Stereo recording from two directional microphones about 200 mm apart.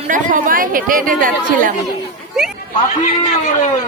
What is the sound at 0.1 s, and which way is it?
A woman's voice, 40° right (ahead or behind).